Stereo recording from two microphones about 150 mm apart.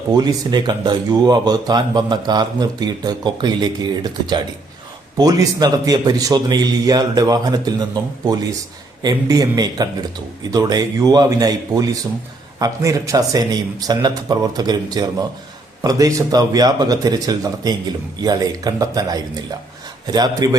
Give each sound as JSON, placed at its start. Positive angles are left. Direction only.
{"t": 0.1, "sound": "speech", "side_deg": -25}